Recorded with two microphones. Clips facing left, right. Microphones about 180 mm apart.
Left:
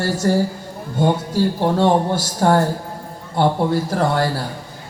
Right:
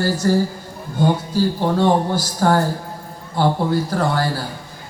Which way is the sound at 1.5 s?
30° left (ahead or behind).